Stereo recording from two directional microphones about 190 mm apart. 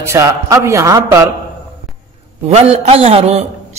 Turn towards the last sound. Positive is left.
turn(degrees=-35)  # may be behind; listen again after turning